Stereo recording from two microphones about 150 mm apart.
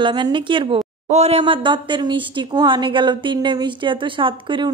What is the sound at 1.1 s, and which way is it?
Speech, 45° right (ahead or behind).